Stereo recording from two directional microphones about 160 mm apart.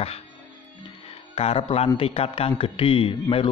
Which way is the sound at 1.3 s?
35° left (ahead or behind).